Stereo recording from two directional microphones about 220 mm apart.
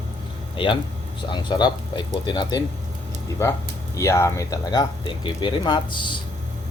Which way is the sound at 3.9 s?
15° left (ahead or behind).